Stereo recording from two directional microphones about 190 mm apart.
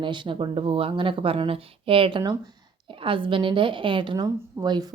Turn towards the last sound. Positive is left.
turn(degrees=-20)  # may be behind; listen again after turning